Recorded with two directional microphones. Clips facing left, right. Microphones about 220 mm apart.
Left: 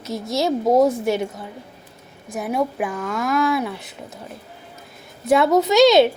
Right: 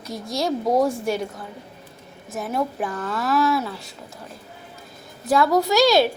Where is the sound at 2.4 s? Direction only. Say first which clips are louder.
Left 3 dB; 15° left (ahead or behind).